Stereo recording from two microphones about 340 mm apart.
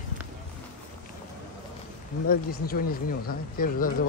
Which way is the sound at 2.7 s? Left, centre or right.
Left.